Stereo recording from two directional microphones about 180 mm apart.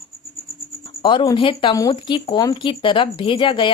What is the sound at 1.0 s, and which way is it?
Speech, 25° left (ahead or behind).